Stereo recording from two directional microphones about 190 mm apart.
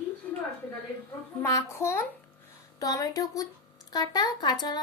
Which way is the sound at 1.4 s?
15° left (ahead or behind).